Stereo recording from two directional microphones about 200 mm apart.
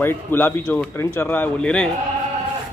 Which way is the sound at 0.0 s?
10° left (ahead or behind).